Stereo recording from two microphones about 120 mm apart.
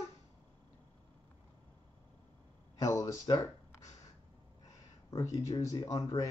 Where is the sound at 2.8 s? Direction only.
25° left (ahead or behind).